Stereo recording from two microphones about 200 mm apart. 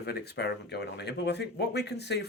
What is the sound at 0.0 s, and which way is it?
Speech, 55° left (ahead or behind).